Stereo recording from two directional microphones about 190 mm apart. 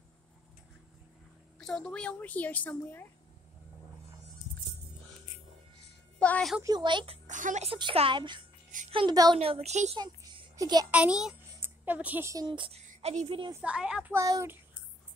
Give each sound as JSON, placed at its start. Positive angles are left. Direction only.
{"t": 1.6, "sound": "a woman's voice", "side_deg": 5}
{"t": 6.1, "sound": "speech", "side_deg": 5}
{"t": 6.6, "sound": "speech", "side_deg": -20}
{"t": 7.2, "sound": "a woman's voice", "side_deg": -40}
{"t": 9.4, "sound": "a woman's voice", "side_deg": -30}
{"t": 9.9, "sound": "a sound", "side_deg": -20}
{"t": 10.9, "sound": "a child's voice", "side_deg": -5}
{"t": 13.6, "sound": "a woman's voice", "side_deg": -5}